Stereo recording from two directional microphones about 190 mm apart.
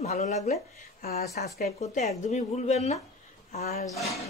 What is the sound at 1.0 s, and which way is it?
Speech, 55° left (ahead or behind).